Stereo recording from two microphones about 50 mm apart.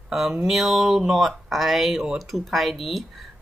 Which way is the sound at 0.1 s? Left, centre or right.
Centre.